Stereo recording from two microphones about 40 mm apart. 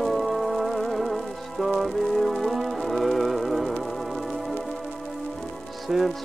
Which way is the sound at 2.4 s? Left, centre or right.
Centre.